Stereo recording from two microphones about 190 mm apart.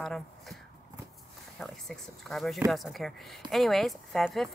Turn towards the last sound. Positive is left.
turn(degrees=0)  # may be behind; listen again after turning